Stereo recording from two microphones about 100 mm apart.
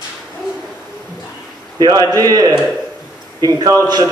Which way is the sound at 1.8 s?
35° right (ahead or behind).